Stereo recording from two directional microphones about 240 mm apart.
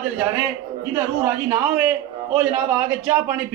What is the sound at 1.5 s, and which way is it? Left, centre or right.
A man's voice, centre.